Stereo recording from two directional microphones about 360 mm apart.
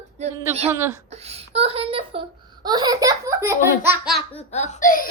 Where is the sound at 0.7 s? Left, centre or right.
Centre.